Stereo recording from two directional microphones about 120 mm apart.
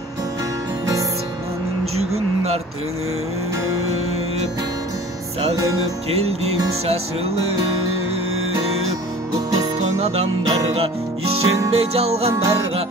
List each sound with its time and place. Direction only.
6.0 s music: 60° right (ahead or behind)
9.9 s music: 60° right (ahead or behind)